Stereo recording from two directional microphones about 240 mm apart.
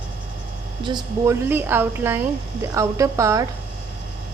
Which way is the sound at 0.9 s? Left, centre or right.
Centre.